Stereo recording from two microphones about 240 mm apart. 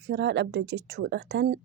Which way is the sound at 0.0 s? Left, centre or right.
Right.